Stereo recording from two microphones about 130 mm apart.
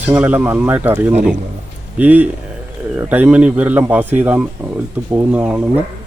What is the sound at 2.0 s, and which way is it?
Speech, 10° right (ahead or behind).